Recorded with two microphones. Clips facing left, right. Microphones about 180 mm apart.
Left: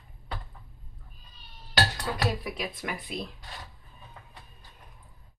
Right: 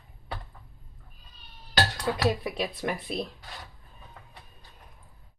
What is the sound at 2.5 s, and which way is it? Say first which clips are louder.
Speech: right 4 dB; 30° right (ahead or behind).